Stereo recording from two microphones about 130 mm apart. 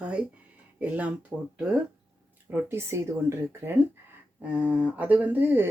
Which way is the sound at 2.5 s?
20° right (ahead or behind).